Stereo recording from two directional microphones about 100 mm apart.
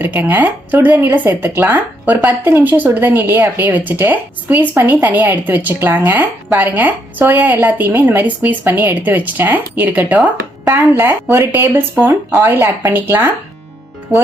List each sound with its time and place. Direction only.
0.0 s a woman's voice: 20° right (ahead or behind)
14.1 s music: 25° right (ahead or behind)